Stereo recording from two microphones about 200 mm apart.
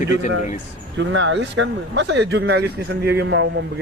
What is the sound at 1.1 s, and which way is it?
Speech, 65° right (ahead or behind).